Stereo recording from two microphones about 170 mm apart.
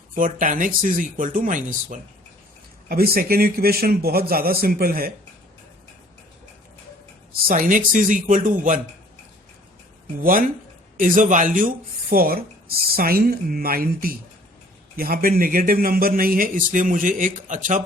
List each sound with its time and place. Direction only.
0.3 s speech: 50° right (ahead or behind)
2.9 s a man's voice: 60° right (ahead or behind)
7.4 s speech: 55° right (ahead or behind)
10.2 s a man's voice: 55° right (ahead or behind)